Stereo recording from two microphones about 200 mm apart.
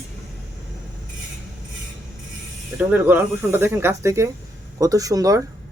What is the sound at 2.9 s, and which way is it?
Speech, 10° right (ahead or behind).